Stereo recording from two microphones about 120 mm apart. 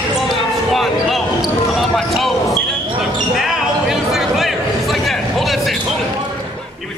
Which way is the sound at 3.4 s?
5° right (ahead or behind).